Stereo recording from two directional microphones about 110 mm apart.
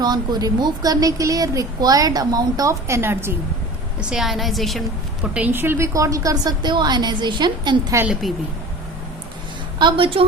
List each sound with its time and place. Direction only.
0.0 s a woman's voice: 40° right (ahead or behind); by 3.3 s 20° right (ahead or behind)
4.1 s a woman's voice: centre (ahead or behind)
5.2 s a woman's voice: 10° right (ahead or behind); by 7.9 s 40° right (ahead or behind)
8.0 s a woman's voice: 5° right (ahead or behind)
9.7 s a woman's voice: 50° right (ahead or behind)